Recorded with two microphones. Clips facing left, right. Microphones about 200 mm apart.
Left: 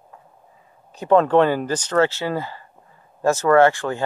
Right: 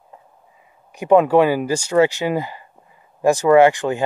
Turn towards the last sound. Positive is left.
turn(degrees=-15)  # may be behind; listen again after turning